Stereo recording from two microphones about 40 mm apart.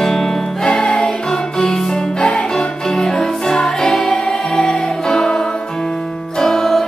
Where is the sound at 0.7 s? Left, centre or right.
Left.